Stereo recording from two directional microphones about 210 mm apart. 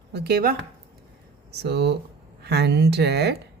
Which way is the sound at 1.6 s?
50° right (ahead or behind).